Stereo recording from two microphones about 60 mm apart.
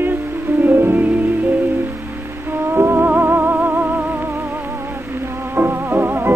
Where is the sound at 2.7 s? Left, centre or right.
Right.